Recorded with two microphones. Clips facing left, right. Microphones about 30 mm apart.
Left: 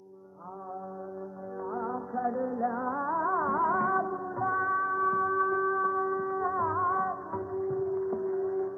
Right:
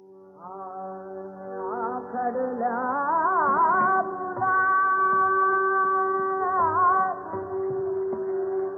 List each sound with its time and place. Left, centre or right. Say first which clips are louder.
1.6 s music: right 5 dB; right